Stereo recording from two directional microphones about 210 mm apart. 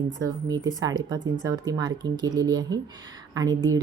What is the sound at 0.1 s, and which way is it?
Speech, 20° right (ahead or behind).